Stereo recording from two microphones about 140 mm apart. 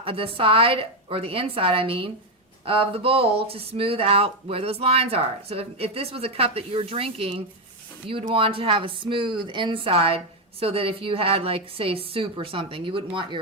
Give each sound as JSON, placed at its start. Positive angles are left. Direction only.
{"t": 0.0, "sound": "a woman's voice", "side_deg": -40}